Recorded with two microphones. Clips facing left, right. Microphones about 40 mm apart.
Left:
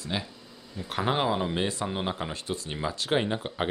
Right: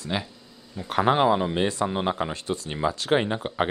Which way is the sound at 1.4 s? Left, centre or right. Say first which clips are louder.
Right 4 dB; centre.